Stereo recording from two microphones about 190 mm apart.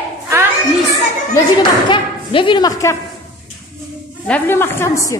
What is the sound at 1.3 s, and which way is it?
Speech, 25° left (ahead or behind).